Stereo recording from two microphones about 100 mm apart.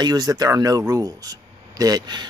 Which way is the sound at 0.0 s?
45° right (ahead or behind).